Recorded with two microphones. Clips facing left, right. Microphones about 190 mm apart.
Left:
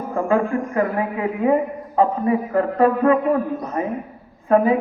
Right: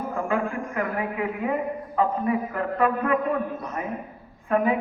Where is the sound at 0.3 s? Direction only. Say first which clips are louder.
Left 9 dB; 35° left (ahead or behind).